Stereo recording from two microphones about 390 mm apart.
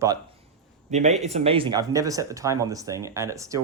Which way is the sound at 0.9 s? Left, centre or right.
Centre.